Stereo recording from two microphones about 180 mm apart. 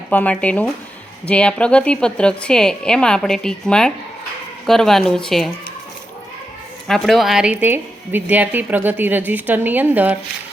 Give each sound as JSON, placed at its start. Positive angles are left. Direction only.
{"t": 0.1, "sound": "a woman's voice", "side_deg": 10}
{"t": 6.8, "sound": "a woman's voice", "side_deg": 0}